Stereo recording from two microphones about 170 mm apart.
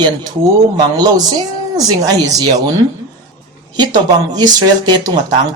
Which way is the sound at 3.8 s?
25° right (ahead or behind).